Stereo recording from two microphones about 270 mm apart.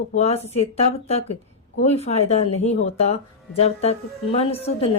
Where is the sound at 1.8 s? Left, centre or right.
Left.